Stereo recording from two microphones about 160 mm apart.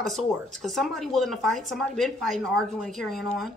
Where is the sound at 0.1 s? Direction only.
Centre (ahead or behind).